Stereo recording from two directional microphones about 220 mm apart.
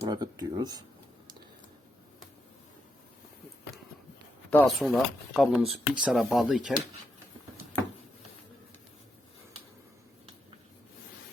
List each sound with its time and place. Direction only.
0.0 s speech: 15° right (ahead or behind)
4.5 s speech: centre (ahead or behind)